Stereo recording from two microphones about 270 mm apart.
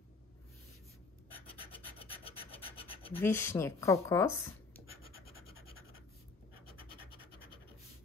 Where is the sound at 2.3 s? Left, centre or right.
Left.